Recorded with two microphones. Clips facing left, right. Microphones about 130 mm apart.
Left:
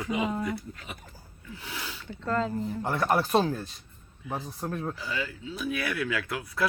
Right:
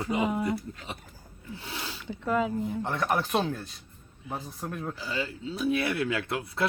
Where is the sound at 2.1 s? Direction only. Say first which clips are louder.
Right 2 dB; 10° right (ahead or behind).